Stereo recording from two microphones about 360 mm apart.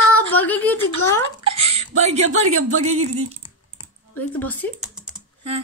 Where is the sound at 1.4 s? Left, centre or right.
Right.